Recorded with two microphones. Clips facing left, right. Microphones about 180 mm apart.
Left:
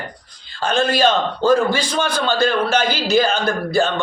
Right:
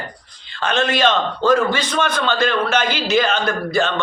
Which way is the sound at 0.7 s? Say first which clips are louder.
Left 1 dB; 35° left (ahead or behind).